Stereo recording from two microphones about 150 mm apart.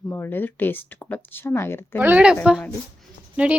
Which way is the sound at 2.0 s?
10° right (ahead or behind).